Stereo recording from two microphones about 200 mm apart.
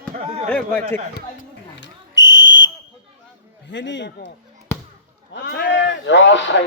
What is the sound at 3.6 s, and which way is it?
Speech, 65° left (ahead or behind).